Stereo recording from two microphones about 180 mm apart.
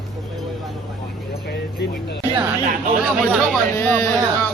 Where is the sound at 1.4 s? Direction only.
65° left (ahead or behind).